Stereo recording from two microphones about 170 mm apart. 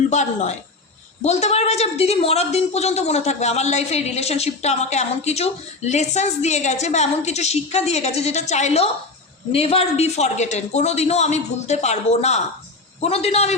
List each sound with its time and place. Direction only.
0.1 s a woman's voice: 45° left (ahead or behind)